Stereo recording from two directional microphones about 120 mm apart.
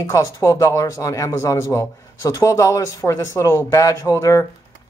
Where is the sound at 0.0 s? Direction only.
30° left (ahead or behind).